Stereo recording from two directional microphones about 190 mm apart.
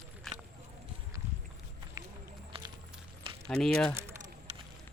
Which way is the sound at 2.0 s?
20° right (ahead or behind).